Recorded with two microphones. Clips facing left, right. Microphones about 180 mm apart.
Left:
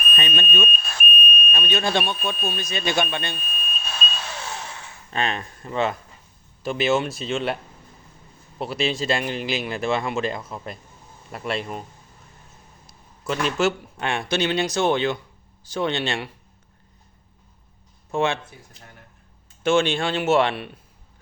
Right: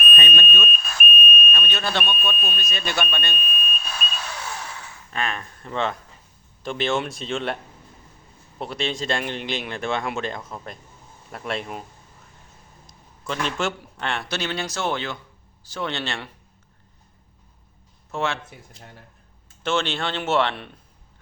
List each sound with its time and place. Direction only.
0.2 s speech: 20° left (ahead or behind)
1.3 s smoke detector: 30° left (ahead or behind)
1.6 s speech: 15° left (ahead or behind)
5.1 s speech: 25° left (ahead or behind)
5.6 s speech: 10° left (ahead or behind)
12.9 s a sound: 5° left (ahead or behind)
13.9 s speech: 15° left (ahead or behind)
18.1 s speech: 15° left (ahead or behind)
19.6 s speech: 10° left (ahead or behind)